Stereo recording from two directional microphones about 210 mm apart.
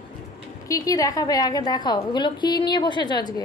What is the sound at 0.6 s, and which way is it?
A woman's voice, 15° left (ahead or behind).